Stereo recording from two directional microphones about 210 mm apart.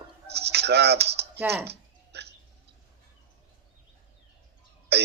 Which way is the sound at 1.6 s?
50° right (ahead or behind).